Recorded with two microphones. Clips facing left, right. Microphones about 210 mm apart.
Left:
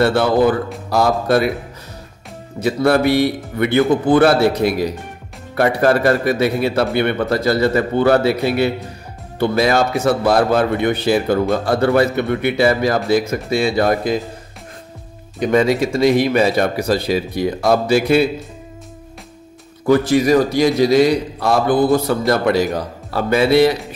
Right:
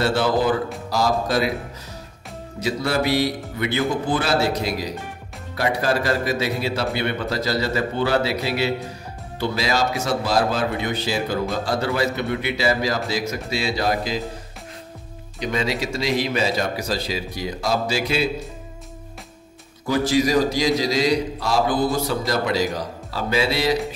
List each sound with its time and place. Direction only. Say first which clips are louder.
0.0 s a man's voice: left 6 dB; 55° left (ahead or behind)
2.6 s a man's voice: left 8 dB; 55° left (ahead or behind)
15.4 s a man's voice: left 9 dB; 50° left (ahead or behind)
19.9 s a man's voice: left 6 dB; 55° left (ahead or behind)